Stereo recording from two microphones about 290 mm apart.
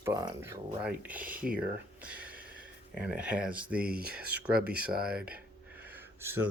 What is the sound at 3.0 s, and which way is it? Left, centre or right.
Speech, centre.